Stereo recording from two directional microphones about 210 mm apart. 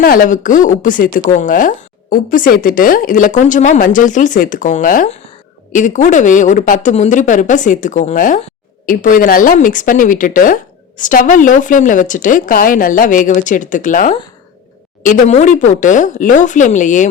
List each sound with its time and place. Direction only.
0.0 s speech: 40° left (ahead or behind)